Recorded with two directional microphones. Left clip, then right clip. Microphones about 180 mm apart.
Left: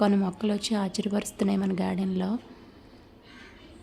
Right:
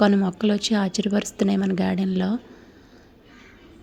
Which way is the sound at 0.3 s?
15° right (ahead or behind).